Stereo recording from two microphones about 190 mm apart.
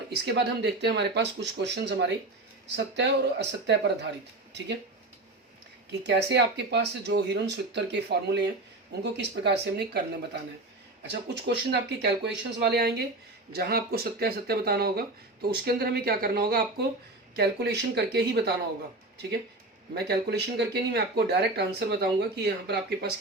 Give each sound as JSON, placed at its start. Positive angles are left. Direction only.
{"t": 0.1, "sound": "speech", "side_deg": -60}
{"t": 6.0, "sound": "speech", "side_deg": -65}
{"t": 11.0, "sound": "speech", "side_deg": -65}
{"t": 19.9, "sound": "speech", "side_deg": -60}